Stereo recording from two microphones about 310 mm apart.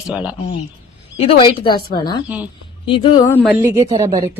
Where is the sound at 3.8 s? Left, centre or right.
Centre.